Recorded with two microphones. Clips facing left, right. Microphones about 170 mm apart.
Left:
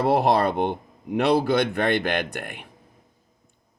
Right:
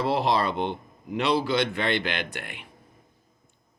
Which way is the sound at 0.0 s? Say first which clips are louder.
Left 4 dB; 55° left (ahead or behind).